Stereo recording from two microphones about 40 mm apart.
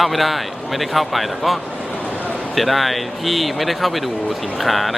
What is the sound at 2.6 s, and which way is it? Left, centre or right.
Speech, centre.